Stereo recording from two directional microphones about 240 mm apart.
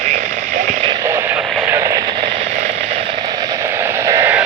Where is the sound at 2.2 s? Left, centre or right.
Right.